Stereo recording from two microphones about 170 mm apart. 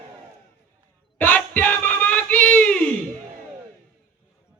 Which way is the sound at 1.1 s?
10° left (ahead or behind).